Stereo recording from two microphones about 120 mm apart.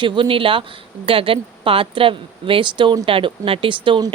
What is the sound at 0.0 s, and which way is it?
A woman's voice, 45° right (ahead or behind).